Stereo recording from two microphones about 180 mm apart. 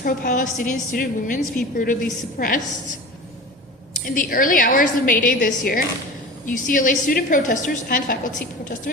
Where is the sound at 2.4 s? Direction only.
50° left (ahead or behind).